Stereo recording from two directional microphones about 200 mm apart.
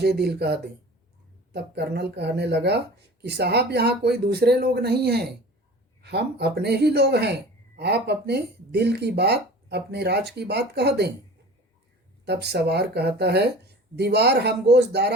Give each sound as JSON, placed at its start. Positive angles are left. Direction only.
{"t": 0.0, "sound": "speech", "side_deg": -55}
{"t": 12.2, "sound": "speech", "side_deg": -55}